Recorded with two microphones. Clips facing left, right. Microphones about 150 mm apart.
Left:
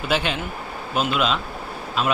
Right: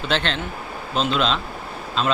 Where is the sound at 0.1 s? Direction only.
10° left (ahead or behind).